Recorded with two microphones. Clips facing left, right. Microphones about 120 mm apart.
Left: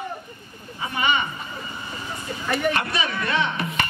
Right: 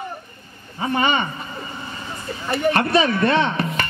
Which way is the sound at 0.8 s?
40° right (ahead or behind).